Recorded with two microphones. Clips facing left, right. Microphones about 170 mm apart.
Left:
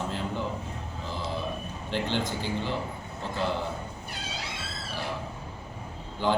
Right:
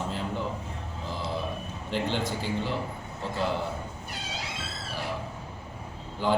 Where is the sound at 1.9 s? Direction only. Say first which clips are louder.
Even; centre (ahead or behind).